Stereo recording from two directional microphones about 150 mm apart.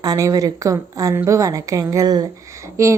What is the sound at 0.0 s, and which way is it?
A woman's voice, 25° right (ahead or behind).